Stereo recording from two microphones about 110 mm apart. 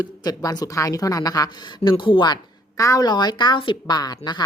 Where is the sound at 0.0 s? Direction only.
35° left (ahead or behind).